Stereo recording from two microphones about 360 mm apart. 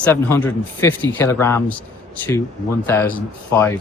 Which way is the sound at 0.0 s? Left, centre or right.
Centre.